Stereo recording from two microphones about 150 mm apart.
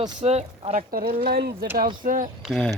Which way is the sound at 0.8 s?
70° right (ahead or behind).